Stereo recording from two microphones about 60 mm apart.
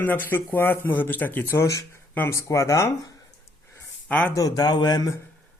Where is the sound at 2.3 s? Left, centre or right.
Left.